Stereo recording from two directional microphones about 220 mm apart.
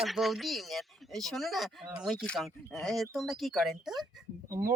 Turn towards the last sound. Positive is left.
turn(degrees=-15)  # may be behind; listen again after turning